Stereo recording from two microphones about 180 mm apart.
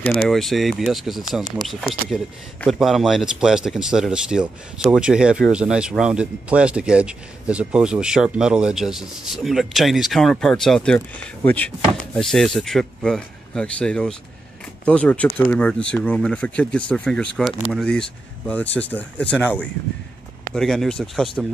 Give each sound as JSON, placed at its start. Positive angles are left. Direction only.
{"t": 0.1, "sound": "speech", "side_deg": 0}